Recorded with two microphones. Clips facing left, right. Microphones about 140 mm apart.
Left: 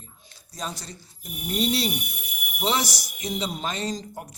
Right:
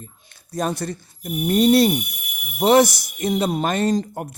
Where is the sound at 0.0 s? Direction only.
55° right (ahead or behind).